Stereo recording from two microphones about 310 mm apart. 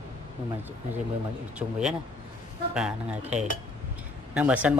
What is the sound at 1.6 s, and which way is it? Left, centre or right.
Speech, centre.